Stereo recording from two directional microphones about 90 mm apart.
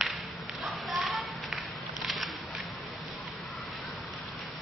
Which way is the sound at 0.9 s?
Centre (ahead or behind).